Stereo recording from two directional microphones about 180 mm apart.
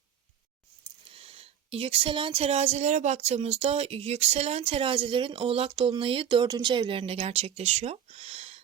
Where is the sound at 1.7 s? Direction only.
30° right (ahead or behind).